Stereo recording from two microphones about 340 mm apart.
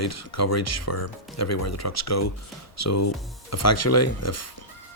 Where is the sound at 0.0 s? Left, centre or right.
Left.